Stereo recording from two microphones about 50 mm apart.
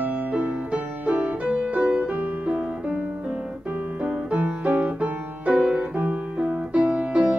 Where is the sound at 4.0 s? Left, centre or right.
Right.